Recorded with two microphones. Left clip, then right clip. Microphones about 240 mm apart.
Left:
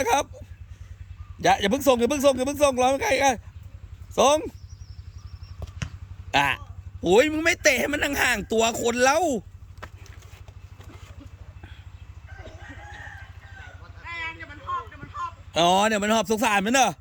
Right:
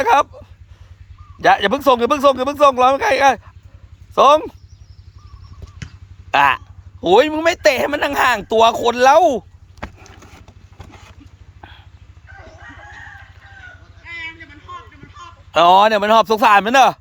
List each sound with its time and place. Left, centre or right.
0.0 s speech: centre
1.4 s speech: centre
6.3 s speech: centre
14.0 s a sound: left
15.5 s speech: centre